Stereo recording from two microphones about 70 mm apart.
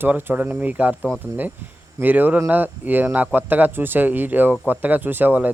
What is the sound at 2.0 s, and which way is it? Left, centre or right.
Speech, right.